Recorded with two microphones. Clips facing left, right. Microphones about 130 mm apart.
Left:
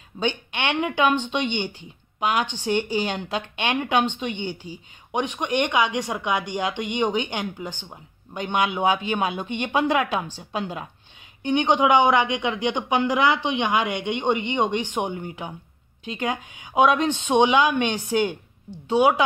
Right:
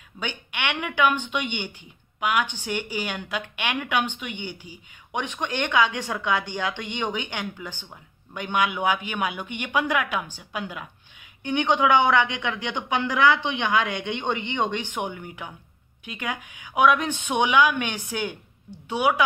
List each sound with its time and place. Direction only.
0.2 s a woman's voice: 25° left (ahead or behind)